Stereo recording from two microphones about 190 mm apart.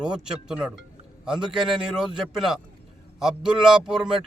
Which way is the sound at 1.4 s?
25° right (ahead or behind).